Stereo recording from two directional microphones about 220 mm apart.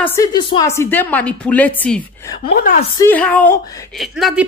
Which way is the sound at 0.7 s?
10° left (ahead or behind).